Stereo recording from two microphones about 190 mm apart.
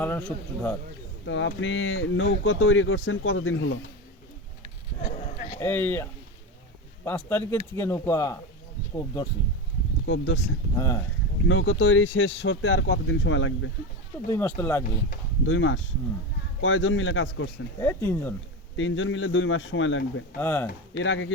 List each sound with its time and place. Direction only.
0.0 s speech: 5° left (ahead or behind)
1.2 s speech: 75° left (ahead or behind); by 3.8 s 90° left
4.9 s bleat: 40° left (ahead or behind)
5.5 s speech: 10° left (ahead or behind)
10.1 s speech: 90° left
10.8 s speech: 20° left (ahead or behind)
11.4 s speech: 90° left
14.3 s speech: 10° left (ahead or behind)
15.4 s speech: 90° left
17.7 s speech: 15° left (ahead or behind)
18.8 s speech: 85° left
20.4 s speech: 10° left (ahead or behind)
21.0 s speech: 85° left